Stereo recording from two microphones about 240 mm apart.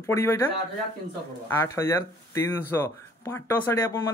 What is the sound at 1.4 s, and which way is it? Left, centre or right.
Speech, centre.